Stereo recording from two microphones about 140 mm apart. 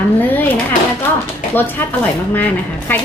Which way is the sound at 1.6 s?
15° left (ahead or behind).